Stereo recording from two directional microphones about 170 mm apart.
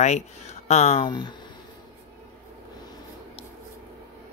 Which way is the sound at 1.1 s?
25° left (ahead or behind).